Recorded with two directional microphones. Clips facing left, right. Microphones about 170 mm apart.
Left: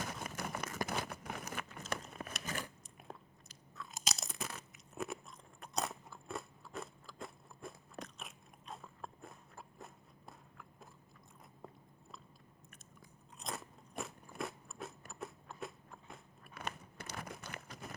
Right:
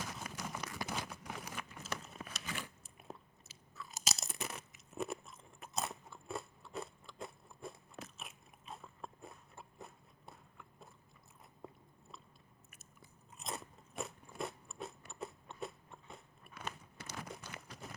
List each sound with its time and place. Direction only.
0.3 s crumpling: 55° left (ahead or behind)
3.0 s crunch: 5° right (ahead or behind)
11.6 s biting: centre (ahead or behind)
12.7 s crunch: 5° right (ahead or behind)
16.6 s crumpling: 60° left (ahead or behind)